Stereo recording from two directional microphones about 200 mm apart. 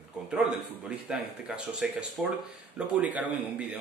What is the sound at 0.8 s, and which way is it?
A man's voice, 5° right (ahead or behind).